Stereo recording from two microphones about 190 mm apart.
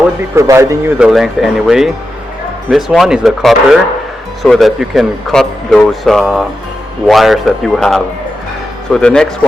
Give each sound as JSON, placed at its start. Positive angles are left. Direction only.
{"t": 0.3, "sound": "speech", "side_deg": -15}
{"t": 0.9, "sound": "speech", "side_deg": -5}